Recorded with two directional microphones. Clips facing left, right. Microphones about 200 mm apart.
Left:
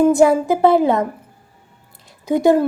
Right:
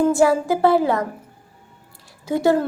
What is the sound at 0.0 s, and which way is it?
A woman's voice, 20° left (ahead or behind).